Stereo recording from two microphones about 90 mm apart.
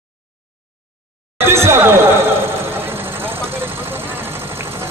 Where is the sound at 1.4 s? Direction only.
30° right (ahead or behind).